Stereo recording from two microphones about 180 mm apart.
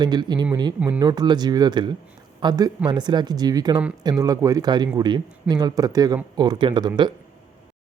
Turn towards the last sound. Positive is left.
turn(degrees=-25)  # may be behind; listen again after turning